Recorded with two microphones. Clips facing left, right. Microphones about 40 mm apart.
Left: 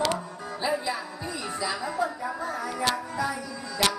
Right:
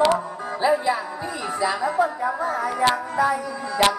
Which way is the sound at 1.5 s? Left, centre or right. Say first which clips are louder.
Right 8 dB; centre.